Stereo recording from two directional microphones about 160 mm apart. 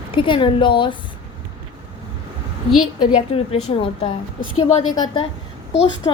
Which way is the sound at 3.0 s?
35° left (ahead or behind).